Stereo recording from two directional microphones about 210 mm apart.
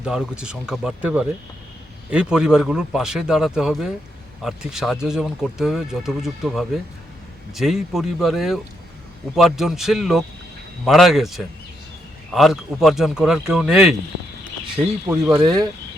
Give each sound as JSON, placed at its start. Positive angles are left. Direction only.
{"t": 0.0, "sound": "speech", "side_deg": -5}
{"t": 15.3, "sound": "speech", "side_deg": -20}